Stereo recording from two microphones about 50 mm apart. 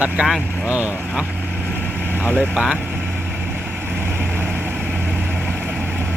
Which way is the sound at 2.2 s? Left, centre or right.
Left.